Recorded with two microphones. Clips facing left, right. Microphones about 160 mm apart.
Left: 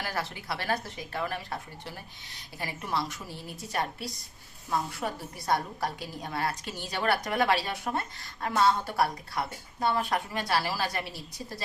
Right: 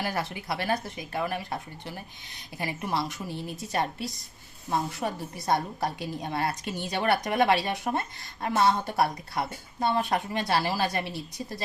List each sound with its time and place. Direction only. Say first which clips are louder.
0.0 s speech: right 3 dB; 15° right (ahead or behind)
2.6 s a woman's voice: right 2 dB; 20° right (ahead or behind)